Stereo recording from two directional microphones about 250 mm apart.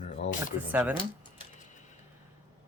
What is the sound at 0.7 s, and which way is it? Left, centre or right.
Speech, centre.